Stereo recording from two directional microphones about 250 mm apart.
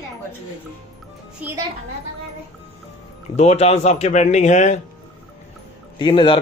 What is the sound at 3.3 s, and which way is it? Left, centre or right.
Speech, left.